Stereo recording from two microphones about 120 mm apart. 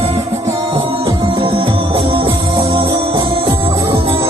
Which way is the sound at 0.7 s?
50° right (ahead or behind).